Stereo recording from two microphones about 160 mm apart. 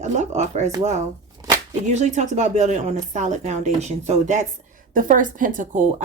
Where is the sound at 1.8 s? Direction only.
45° right (ahead or behind).